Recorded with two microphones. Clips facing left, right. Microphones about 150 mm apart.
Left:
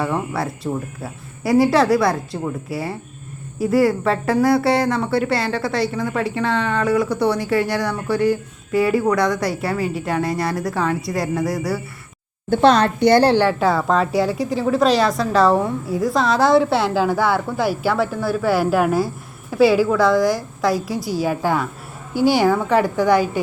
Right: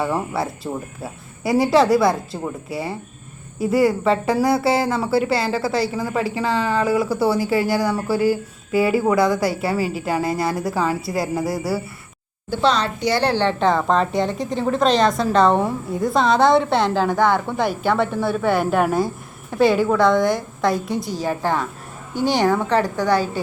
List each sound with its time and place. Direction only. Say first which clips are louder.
0.0 s a woman's voice: even; centre (ahead or behind)
12.5 s a woman's voice: left 5 dB; 55° left (ahead or behind)
13.3 s a woman's voice: left 2 dB; 10° left (ahead or behind)